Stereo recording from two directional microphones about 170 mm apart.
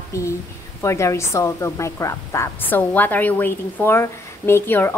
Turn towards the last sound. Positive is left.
turn(degrees=15)  # may be behind; listen again after turning